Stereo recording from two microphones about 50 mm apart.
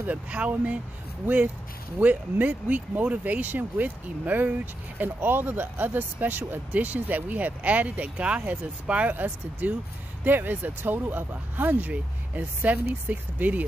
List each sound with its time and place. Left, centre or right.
0.1 s speech: right
2.0 s speech: right